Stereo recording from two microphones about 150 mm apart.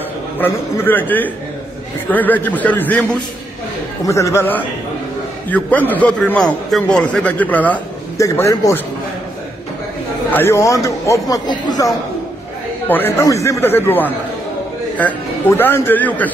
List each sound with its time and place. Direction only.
0.4 s a man's voice: 15° left (ahead or behind)
8.2 s speech: 20° left (ahead or behind)
10.3 s speech: 15° left (ahead or behind)
12.8 s a man's voice: 15° left (ahead or behind)